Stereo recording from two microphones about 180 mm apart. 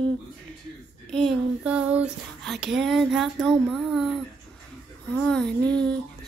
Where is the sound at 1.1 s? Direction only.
Centre (ahead or behind).